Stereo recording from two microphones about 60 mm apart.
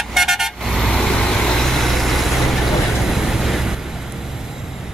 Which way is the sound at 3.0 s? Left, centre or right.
Centre.